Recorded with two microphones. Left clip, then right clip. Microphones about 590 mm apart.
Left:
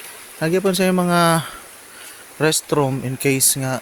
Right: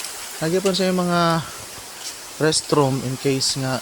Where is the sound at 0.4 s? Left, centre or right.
Left.